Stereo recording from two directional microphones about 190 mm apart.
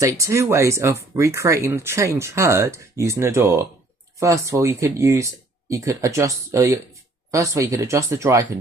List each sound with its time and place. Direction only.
0.0 s speech: 15° right (ahead or behind)